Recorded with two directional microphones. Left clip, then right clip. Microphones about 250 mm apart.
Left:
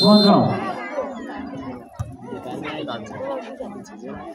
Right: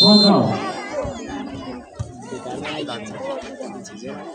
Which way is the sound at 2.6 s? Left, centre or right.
Right.